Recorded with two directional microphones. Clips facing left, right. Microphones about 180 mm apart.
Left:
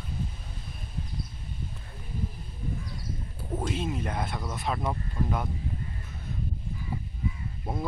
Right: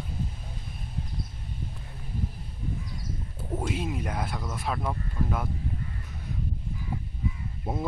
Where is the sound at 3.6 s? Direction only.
10° right (ahead or behind).